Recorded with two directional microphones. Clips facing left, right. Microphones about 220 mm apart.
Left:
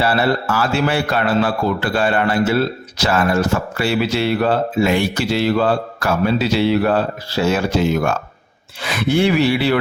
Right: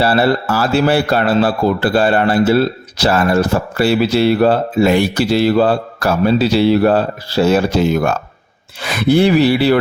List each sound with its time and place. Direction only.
0.0 s a man's voice: 35° right (ahead or behind)